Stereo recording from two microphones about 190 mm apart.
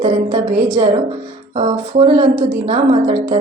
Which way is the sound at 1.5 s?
30° right (ahead or behind).